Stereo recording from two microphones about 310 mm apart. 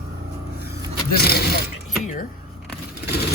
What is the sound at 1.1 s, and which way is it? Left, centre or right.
Speech, left.